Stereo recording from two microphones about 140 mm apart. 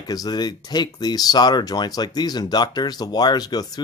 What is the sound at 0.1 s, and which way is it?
Speech, 30° left (ahead or behind).